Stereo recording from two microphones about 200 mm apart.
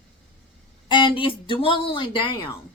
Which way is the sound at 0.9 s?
25° left (ahead or behind).